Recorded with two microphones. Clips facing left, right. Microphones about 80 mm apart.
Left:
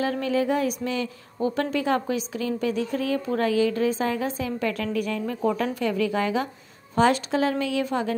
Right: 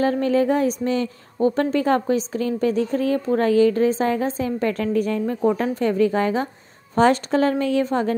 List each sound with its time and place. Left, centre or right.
0.0 s a woman's voice: right